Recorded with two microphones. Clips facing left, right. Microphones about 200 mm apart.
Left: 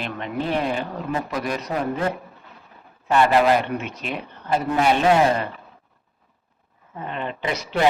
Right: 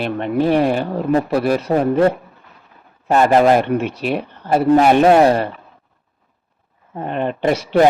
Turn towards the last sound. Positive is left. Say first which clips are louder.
# right 9 dB
turn(degrees=-50)  # may be behind; listen again after turning